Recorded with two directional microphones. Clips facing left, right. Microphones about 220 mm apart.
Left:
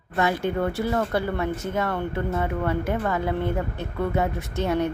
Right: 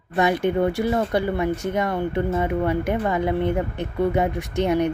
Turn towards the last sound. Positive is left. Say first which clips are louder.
# right 4 dB
turn(degrees=-15)  # may be behind; listen again after turning